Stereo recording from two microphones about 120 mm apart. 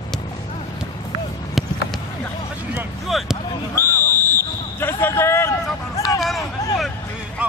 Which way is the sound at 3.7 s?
20° left (ahead or behind).